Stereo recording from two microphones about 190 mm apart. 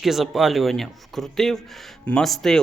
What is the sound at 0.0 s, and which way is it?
Speech, centre (ahead or behind).